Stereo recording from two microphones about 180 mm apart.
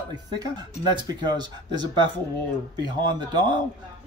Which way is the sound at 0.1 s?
25° right (ahead or behind).